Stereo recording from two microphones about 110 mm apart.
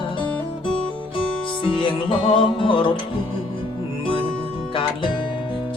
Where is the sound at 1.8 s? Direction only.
50° left (ahead or behind).